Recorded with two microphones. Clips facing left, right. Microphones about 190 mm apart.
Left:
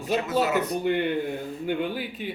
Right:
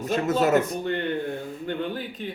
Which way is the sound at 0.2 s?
45° right (ahead or behind).